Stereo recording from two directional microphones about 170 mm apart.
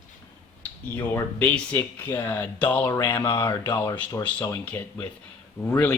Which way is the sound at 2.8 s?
20° left (ahead or behind).